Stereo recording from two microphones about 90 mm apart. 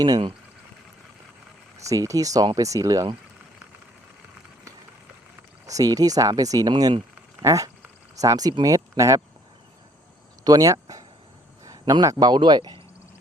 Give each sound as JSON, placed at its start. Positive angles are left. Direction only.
{"t": 1.8, "sound": "speech", "side_deg": -35}
{"t": 5.6, "sound": "speech", "side_deg": -40}
{"t": 10.4, "sound": "speech", "side_deg": -40}